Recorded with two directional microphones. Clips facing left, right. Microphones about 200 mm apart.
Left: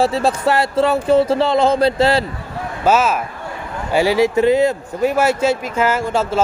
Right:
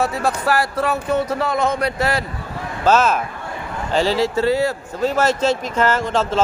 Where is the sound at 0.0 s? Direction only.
30° left (ahead or behind).